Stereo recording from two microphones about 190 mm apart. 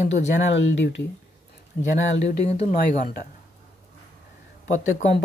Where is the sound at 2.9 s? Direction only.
50° left (ahead or behind).